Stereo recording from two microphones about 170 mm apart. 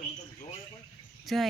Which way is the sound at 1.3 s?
Centre (ahead or behind).